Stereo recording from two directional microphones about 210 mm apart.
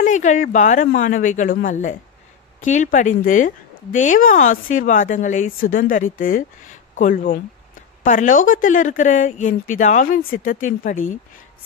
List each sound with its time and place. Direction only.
0.0 s speech: 35° left (ahead or behind)